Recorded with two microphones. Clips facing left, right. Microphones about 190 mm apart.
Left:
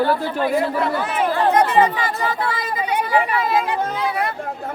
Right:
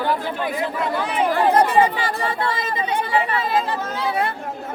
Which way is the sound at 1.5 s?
30° right (ahead or behind).